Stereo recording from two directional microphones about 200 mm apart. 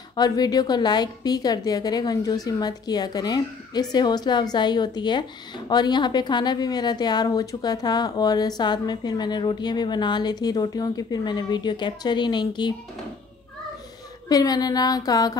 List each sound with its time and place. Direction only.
0.1 s a woman's voice: 20° left (ahead or behind)
14.3 s a woman's voice: 20° left (ahead or behind)